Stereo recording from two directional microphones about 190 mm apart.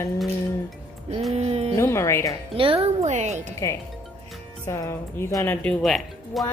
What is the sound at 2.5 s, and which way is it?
Speech, 30° right (ahead or behind).